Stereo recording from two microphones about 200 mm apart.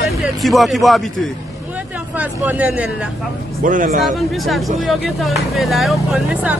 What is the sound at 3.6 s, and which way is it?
Speech, 40° right (ahead or behind).